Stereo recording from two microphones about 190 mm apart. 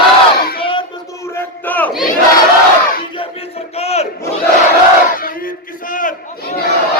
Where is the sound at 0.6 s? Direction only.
25° left (ahead or behind); by 1.9 s 10° left (ahead or behind).